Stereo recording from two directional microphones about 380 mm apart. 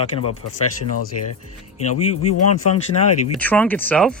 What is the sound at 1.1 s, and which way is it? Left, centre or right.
Speech, left.